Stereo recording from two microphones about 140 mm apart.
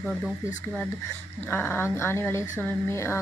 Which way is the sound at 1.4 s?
15° left (ahead or behind).